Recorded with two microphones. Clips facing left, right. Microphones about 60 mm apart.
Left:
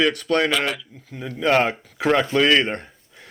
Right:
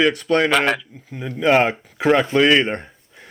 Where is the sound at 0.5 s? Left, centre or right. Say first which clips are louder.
Right 5 dB; right.